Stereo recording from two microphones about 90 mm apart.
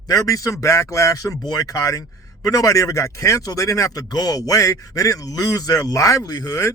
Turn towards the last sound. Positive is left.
turn(degrees=40)  # may be behind; listen again after turning